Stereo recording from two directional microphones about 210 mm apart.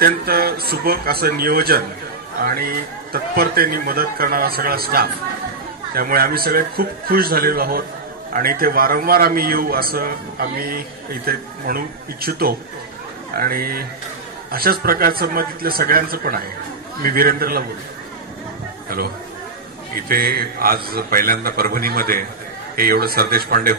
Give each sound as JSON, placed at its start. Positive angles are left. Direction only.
{"t": 0.0, "sound": "a man's voice", "side_deg": -45}
{"t": 20.0, "sound": "a man's voice", "side_deg": -45}